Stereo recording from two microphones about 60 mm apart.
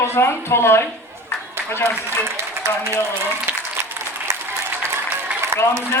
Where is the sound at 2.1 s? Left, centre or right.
Right.